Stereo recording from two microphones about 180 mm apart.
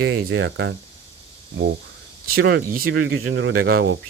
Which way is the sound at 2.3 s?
60° right (ahead or behind).